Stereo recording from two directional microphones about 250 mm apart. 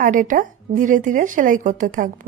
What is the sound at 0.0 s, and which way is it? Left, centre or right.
A woman's voice, right.